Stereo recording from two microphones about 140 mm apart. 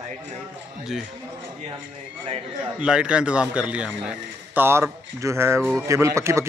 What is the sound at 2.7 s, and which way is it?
Speech, 5° right (ahead or behind).